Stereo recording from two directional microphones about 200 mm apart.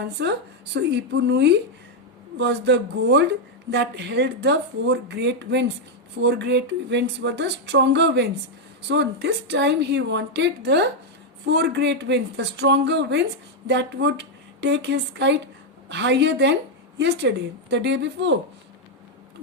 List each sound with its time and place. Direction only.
0.0 s speech: 55° right (ahead or behind)